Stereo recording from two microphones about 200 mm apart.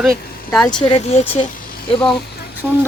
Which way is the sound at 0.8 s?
30° left (ahead or behind).